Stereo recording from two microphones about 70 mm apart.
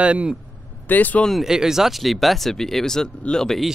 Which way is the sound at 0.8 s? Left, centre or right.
Left.